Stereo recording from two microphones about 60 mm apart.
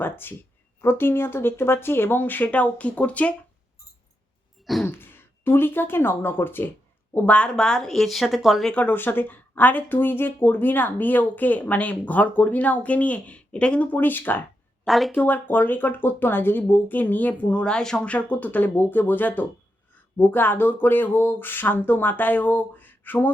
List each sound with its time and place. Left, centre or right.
0.0 s speech: left
4.6 s throat clearing: centre
4.9 s speech: left
7.3 s speech: centre
8.7 s speech: left
14.8 s speech: centre
15.1 s speech: left; by 18.1 s centre
18.1 s speech: left